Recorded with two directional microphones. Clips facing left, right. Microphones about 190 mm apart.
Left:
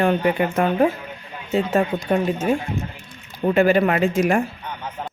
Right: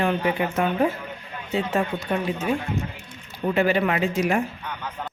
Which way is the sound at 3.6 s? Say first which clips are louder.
Left 5 dB; 45° left (ahead or behind).